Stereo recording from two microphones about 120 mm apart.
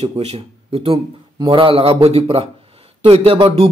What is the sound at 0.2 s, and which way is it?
Speech, 55° right (ahead or behind).